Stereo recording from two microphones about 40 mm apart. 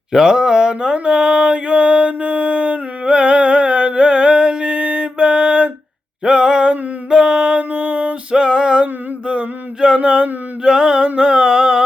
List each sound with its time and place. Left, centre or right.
0.1 s speech: centre
0.9 s mantra: right
6.2 s a sound: centre
7.7 s music: right
8.3 s music: right
10.0 s mantra: right
11.2 s music: right